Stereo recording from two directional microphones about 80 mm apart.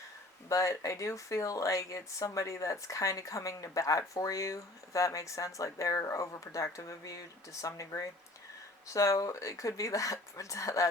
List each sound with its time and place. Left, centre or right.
0.4 s speech: left